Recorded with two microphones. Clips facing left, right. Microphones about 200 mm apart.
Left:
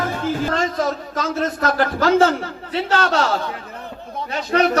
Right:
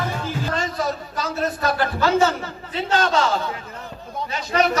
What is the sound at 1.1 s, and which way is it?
A man's voice, 90° left.